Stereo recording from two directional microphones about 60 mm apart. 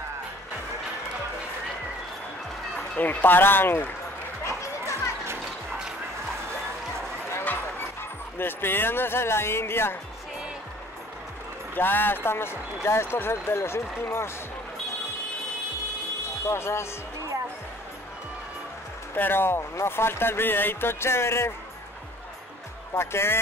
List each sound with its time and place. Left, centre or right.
3.0 s speech: left
8.4 s speech: left
11.7 s speech: left
16.4 s speech: left
19.1 s speech: left
22.9 s speech: left